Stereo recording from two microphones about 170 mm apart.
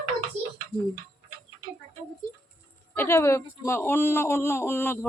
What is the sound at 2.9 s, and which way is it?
Speech, 15° left (ahead or behind).